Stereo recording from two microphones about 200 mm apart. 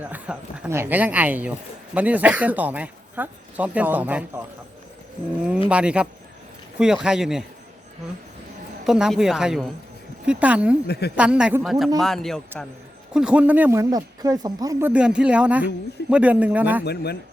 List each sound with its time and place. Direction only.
0.0 s speech: 5° right (ahead or behind)
5.6 s speech: 5° right (ahead or behind)
8.9 s speech: centre (ahead or behind)
16.8 s speech: 55° left (ahead or behind)